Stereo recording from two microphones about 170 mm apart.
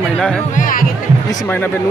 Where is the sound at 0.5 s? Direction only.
55° left (ahead or behind).